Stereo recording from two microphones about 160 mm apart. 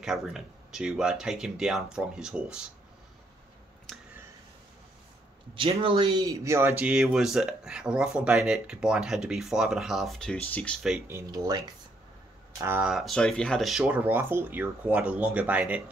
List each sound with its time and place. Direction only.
0.0 s speech: centre (ahead or behind)
5.5 s speech: 30° right (ahead or behind); by 6.7 s 15° right (ahead or behind)
6.8 s speech: 5° right (ahead or behind)
11.1 s speech: 20° right (ahead or behind)
12.5 s speech: 15° right (ahead or behind)
12.8 s speech: centre (ahead or behind)